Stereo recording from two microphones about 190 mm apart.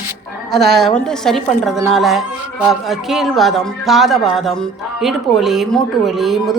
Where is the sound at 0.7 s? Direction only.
Centre (ahead or behind).